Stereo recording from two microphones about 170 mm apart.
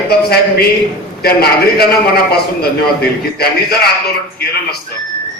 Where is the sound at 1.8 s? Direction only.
65° left (ahead or behind).